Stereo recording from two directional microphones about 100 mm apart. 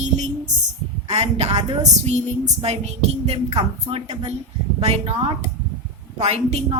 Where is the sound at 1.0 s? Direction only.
90° right.